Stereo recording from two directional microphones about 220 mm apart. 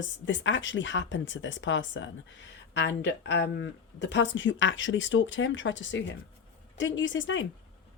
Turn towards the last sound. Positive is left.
turn(degrees=60)  # may be behind; listen again after turning